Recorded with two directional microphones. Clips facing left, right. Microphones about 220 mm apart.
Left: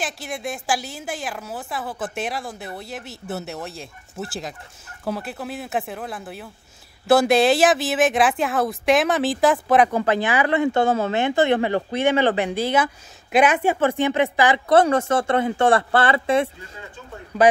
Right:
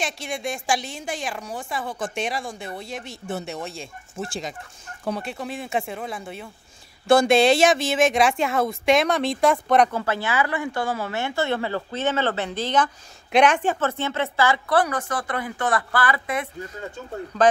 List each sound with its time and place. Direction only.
0.0 s a woman's voice: 5° left (ahead or behind)
9.9 s speech: 15° left (ahead or behind)
17.3 s speech: 10° left (ahead or behind)